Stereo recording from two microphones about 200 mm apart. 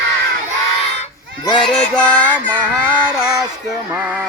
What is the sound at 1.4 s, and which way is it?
Speech, 25° left (ahead or behind).